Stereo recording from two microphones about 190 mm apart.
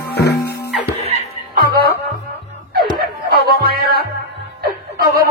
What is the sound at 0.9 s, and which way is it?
Chuckle, 35° left (ahead or behind).